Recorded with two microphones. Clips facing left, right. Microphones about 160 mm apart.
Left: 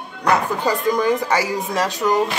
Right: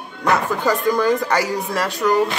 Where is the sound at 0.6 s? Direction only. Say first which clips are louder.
Right 1 dB; 15° left (ahead or behind).